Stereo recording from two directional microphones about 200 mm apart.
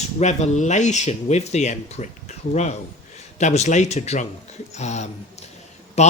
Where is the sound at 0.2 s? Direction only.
35° left (ahead or behind).